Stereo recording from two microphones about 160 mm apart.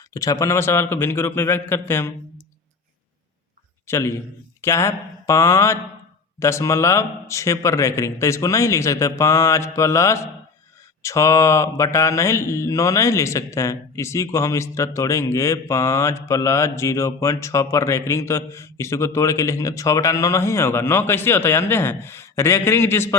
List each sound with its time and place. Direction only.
0.1 s mantra: 20° left (ahead or behind)
3.8 s mantra: 15° left (ahead or behind)
6.4 s a man's voice: 20° left (ahead or behind)
11.0 s mantra: 20° left (ahead or behind)